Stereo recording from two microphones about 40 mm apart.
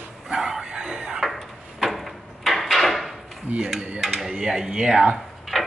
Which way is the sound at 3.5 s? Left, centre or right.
Right.